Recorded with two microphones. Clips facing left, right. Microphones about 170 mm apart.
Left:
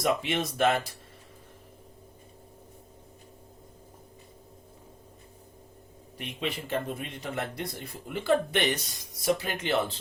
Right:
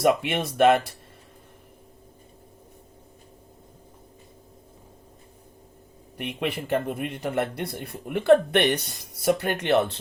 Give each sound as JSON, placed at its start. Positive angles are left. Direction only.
{"t": 0.0, "sound": "a man's voice", "side_deg": -60}
{"t": 6.1, "sound": "a man's voice", "side_deg": -60}